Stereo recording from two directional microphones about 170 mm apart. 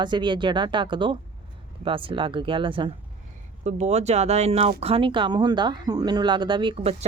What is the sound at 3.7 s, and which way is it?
Speech, 40° right (ahead or behind).